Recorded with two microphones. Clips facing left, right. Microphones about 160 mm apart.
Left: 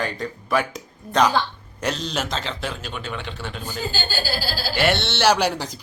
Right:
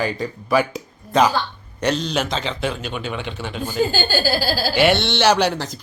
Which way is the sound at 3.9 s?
45° right (ahead or behind).